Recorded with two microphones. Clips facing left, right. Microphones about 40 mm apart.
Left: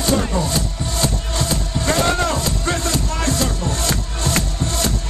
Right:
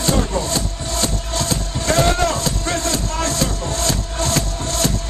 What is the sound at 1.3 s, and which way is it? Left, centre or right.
Music, left.